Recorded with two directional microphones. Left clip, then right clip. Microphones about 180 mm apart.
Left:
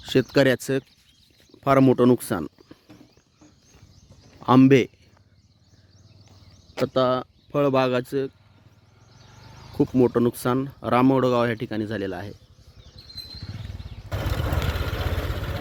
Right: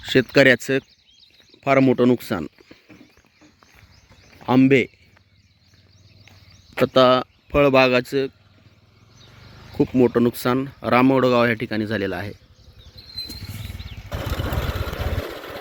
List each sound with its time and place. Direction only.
0.0 s speech: centre (ahead or behind)
1.6 s speech: 10° left (ahead or behind)
4.4 s speech: 20° left (ahead or behind)
6.8 s speech: 15° right (ahead or behind)
9.7 s speech: 5° left (ahead or behind)
13.1 s wild animals: 20° right (ahead or behind)